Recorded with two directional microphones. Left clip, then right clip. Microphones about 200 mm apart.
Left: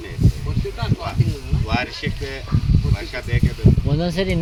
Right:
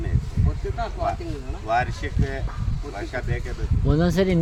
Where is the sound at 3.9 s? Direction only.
60° right (ahead or behind).